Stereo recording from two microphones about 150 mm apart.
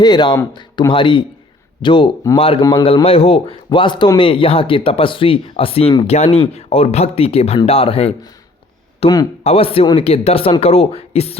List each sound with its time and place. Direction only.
0.0 s speech: 30° left (ahead or behind)
2.8 s speech: 40° left (ahead or behind)